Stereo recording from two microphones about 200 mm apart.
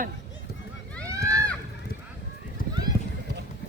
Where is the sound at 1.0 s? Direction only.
15° right (ahead or behind).